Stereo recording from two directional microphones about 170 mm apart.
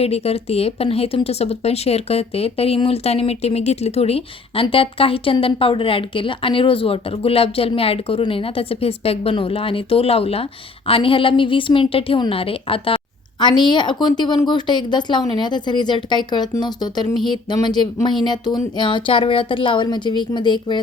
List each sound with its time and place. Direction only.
0.0 s a woman's voice: 35° left (ahead or behind)